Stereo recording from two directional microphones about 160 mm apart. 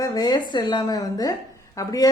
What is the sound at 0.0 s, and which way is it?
A woman's voice, 25° left (ahead or behind).